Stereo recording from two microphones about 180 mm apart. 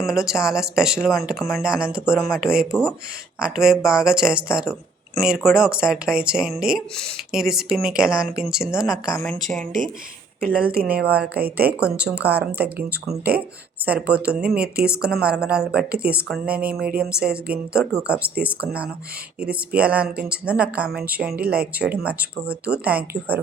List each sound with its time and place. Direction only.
0.1 s speech: 5° right (ahead or behind)
10.7 s speech: 55° right (ahead or behind)
11.0 s speech: 5° right (ahead or behind)